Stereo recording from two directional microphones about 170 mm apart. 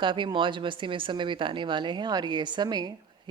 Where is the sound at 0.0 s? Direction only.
25° right (ahead or behind).